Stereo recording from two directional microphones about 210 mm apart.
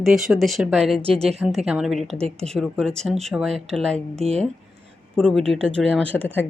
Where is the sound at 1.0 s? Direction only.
25° right (ahead or behind).